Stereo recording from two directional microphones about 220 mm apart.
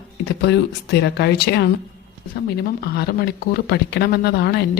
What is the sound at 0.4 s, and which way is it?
Speech, 50° left (ahead or behind).